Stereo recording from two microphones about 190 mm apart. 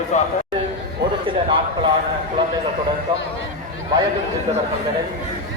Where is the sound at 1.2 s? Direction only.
25° right (ahead or behind).